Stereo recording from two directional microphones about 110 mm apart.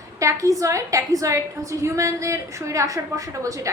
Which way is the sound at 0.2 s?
30° right (ahead or behind).